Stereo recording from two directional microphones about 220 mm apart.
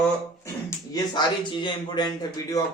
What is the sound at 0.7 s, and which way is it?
Speech, 20° left (ahead or behind).